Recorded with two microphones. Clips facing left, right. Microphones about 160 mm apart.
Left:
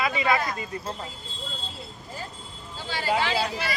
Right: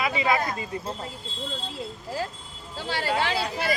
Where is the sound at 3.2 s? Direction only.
50° right (ahead or behind).